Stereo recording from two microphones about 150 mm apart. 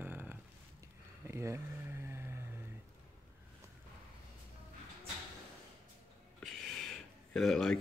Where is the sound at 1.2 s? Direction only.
20° right (ahead or behind).